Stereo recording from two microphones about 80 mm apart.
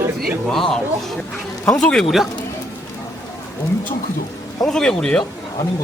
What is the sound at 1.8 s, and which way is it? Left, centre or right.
Speech, centre.